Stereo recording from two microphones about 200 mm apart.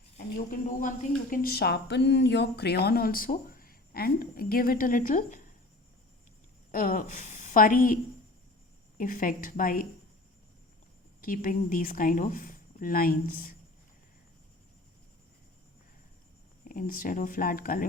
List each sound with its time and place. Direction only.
0.3 s speech: 40° left (ahead or behind)
6.7 s a woman's voice: 45° left (ahead or behind)
9.0 s speech: 40° left (ahead or behind)
11.2 s speech: 40° left (ahead or behind)
16.6 s speech: 45° left (ahead or behind)